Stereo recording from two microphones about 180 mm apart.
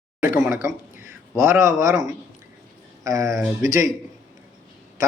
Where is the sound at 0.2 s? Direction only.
5° right (ahead or behind).